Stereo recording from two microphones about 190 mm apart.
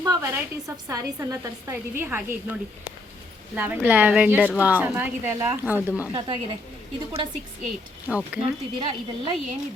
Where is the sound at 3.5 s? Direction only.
10° right (ahead or behind).